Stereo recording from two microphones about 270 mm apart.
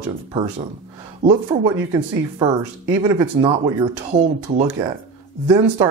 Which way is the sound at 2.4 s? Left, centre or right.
Centre.